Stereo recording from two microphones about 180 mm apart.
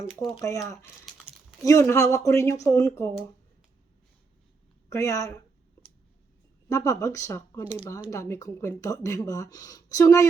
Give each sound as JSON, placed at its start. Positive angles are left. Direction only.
{"t": 0.1, "sound": "speech", "side_deg": 0}
{"t": 0.4, "sound": "speech", "side_deg": 15}
{"t": 1.3, "sound": "a sound", "side_deg": -5}
{"t": 1.6, "sound": "speech", "side_deg": 15}
{"t": 4.9, "sound": "speech", "side_deg": 15}
{"t": 6.7, "sound": "speech", "side_deg": 20}